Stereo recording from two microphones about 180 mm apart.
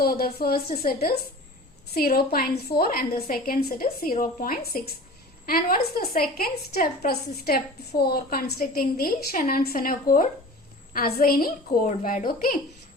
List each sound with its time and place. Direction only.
0.0 s a woman's voice: 55° left (ahead or behind)